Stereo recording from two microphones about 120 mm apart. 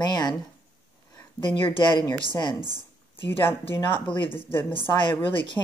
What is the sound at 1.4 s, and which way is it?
Speech, 45° left (ahead or behind).